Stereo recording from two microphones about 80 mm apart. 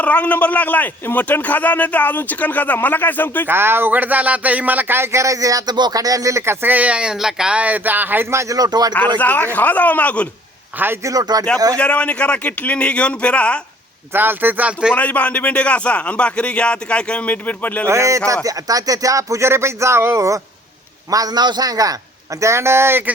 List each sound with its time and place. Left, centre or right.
0.0 s a man's voice: centre
3.4 s speech: right
8.5 s a man's voice: right
8.9 s a man's voice: left
11.0 s a man's voice: right
11.8 s speech: centre
14.1 s speech: right
14.9 s speech: centre
17.8 s speech: right
21.1 s a man's voice: right